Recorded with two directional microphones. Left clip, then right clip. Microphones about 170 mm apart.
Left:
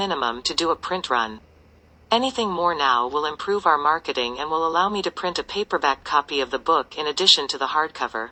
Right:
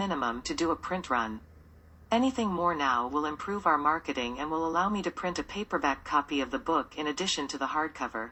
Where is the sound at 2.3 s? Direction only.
25° left (ahead or behind).